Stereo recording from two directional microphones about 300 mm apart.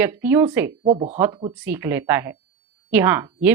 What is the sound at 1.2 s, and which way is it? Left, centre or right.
Speech, centre.